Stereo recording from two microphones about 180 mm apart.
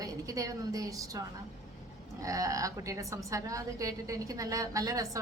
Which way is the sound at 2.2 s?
20° right (ahead or behind).